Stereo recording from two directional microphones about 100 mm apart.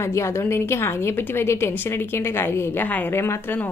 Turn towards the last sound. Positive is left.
turn(degrees=20)  # may be behind; listen again after turning